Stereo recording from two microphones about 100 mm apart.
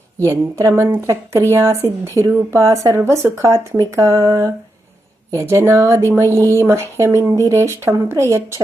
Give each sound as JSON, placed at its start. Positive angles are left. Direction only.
{"t": 0.3, "sound": "speech", "side_deg": -30}